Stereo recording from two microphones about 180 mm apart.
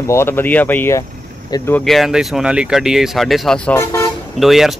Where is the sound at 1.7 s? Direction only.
Centre (ahead or behind).